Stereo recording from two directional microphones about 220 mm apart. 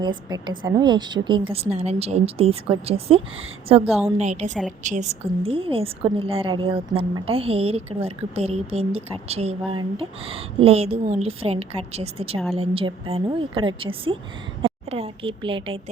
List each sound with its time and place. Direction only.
0.0 s a woman's voice: 20° right (ahead or behind)